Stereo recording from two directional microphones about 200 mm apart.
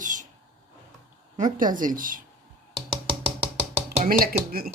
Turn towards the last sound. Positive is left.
turn(degrees=-50)  # may be behind; listen again after turning